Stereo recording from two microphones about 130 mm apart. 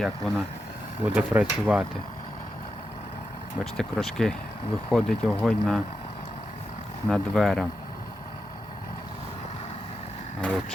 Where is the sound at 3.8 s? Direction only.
5° left (ahead or behind).